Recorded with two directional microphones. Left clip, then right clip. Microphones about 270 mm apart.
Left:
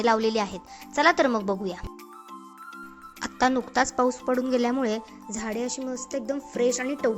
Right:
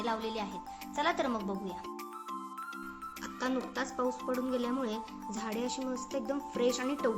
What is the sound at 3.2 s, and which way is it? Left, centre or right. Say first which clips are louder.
Speech: left 12 dB; left.